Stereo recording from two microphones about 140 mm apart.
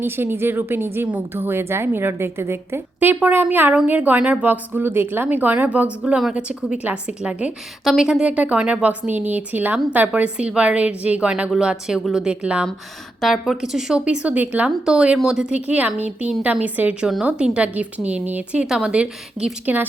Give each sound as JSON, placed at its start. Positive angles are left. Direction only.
{"t": 0.0, "sound": "a woman's voice", "side_deg": -15}